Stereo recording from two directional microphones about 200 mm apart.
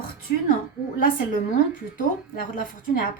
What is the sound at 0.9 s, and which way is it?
Speech, 45° left (ahead or behind).